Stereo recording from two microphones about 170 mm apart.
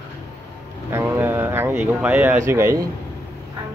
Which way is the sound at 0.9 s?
15° right (ahead or behind).